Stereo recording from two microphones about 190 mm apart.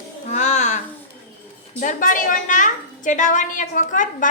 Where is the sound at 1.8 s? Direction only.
45° left (ahead or behind).